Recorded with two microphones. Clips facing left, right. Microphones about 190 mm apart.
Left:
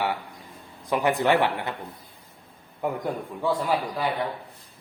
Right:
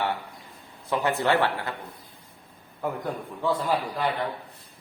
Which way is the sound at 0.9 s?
15° left (ahead or behind).